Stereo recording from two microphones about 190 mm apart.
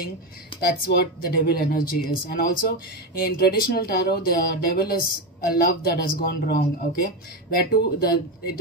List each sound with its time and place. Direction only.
0.6 s speech: 55° left (ahead or behind)